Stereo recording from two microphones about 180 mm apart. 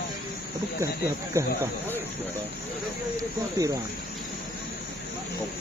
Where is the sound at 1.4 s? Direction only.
15° right (ahead or behind).